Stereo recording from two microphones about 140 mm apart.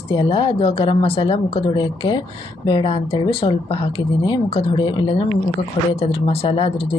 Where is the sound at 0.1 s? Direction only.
40° left (ahead or behind).